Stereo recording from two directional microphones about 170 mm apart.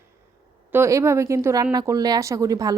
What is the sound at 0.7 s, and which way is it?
Speech, 15° right (ahead or behind).